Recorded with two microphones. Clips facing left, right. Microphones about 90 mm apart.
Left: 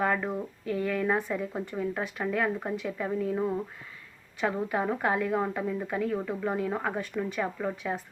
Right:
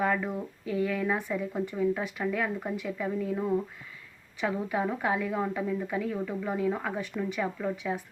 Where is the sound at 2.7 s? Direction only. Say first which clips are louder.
Left 1 dB; 5° right (ahead or behind).